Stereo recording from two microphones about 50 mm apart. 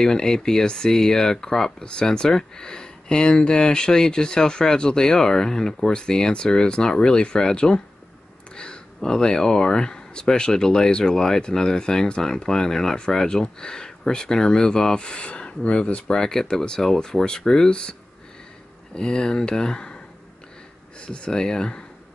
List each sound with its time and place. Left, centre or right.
0.0 s speech: centre
18.9 s speech: centre
21.0 s speech: centre